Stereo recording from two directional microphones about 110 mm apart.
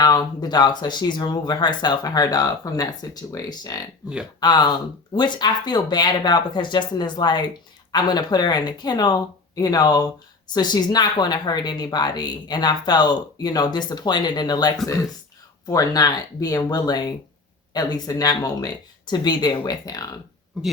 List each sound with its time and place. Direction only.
0.0 s a woman's voice: 40° left (ahead or behind)